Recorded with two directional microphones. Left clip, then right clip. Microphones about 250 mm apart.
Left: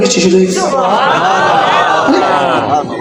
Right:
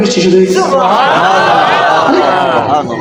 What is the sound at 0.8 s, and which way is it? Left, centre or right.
Speech, right.